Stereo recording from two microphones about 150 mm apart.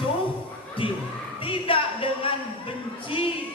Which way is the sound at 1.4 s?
35° left (ahead or behind).